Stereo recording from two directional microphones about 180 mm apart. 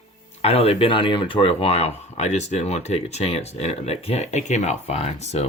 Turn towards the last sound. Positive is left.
turn(degrees=35)  # may be behind; listen again after turning